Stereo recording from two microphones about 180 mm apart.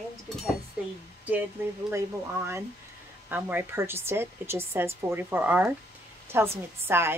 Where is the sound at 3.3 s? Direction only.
10° right (ahead or behind).